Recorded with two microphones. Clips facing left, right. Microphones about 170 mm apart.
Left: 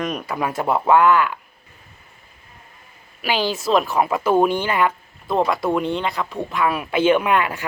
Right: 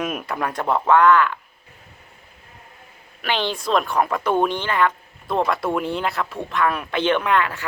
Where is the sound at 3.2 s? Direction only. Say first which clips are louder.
Left 2 dB; 5° left (ahead or behind).